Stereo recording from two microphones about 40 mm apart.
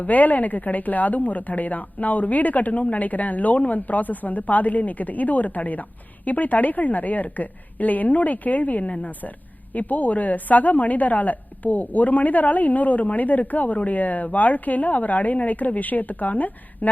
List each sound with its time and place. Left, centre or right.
0.0 s a woman's voice: left